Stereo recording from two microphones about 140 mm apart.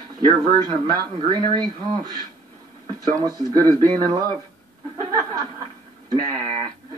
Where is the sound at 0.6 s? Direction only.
30° right (ahead or behind).